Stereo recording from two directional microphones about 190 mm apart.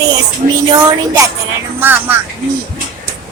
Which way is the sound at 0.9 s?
15° right (ahead or behind).